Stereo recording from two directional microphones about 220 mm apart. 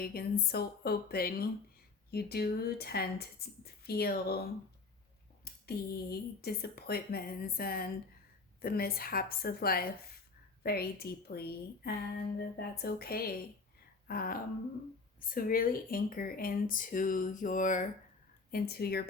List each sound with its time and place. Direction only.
0.0 s speech: 45° left (ahead or behind)
5.6 s speech: 45° left (ahead or behind)